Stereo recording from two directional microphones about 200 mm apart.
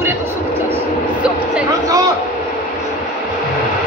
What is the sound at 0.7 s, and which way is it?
Vehicle, 5° right (ahead or behind).